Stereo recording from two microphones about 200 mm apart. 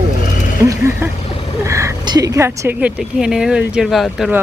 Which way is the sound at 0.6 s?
10° right (ahead or behind).